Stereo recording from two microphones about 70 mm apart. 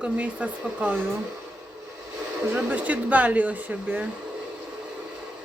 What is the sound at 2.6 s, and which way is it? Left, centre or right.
Speech, right.